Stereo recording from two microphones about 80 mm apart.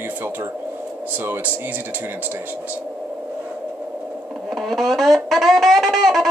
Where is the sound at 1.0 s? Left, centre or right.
Right.